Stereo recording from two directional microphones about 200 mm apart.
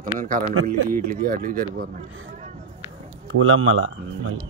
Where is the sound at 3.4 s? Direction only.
90° right.